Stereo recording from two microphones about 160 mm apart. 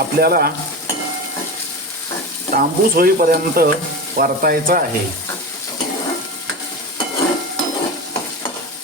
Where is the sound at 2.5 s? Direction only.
70° right (ahead or behind).